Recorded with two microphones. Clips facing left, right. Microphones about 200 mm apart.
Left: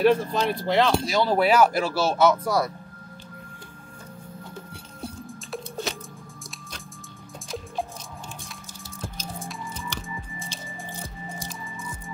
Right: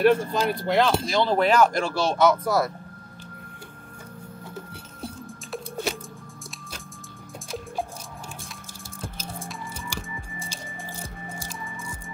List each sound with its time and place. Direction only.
0.0 s speech: centre (ahead or behind)
9.9 s music: 10° right (ahead or behind)